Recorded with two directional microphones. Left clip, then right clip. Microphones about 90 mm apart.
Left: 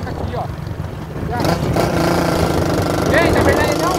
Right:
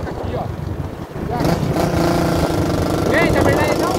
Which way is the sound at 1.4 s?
15° left (ahead or behind).